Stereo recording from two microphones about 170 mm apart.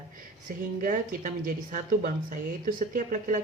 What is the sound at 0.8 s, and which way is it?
A woman's voice, 55° right (ahead or behind).